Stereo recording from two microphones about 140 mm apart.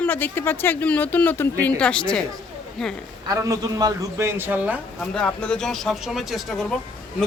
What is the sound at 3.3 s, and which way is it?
A man's voice, 25° right (ahead or behind).